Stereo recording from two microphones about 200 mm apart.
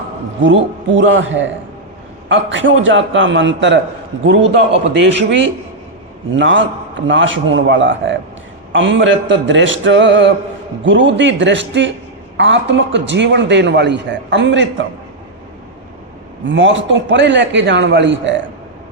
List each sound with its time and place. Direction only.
0.9 s a man's voice: 70° right (ahead or behind)
16.5 s a man's voice: 65° right (ahead or behind)